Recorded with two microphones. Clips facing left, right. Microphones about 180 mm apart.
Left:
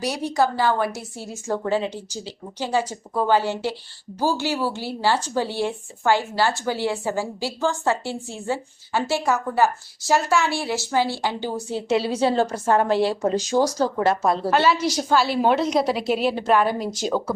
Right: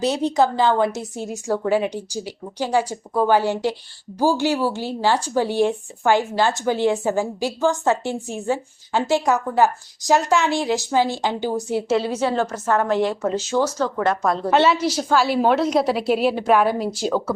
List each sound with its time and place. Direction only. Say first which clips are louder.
0.0 s a woman's voice: right 3 dB; 20° right (ahead or behind)
12.0 s a woman's voice: left 1 dB; 30° left (ahead or behind)
13.6 s speech: left 1 dB; 10° left (ahead or behind)
13.9 s a woman's voice: even; 25° left (ahead or behind)
14.2 s a woman's voice: right 2 dB; 5° left (ahead or behind)